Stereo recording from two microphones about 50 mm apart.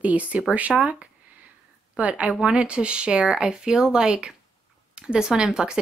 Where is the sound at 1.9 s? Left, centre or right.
Right.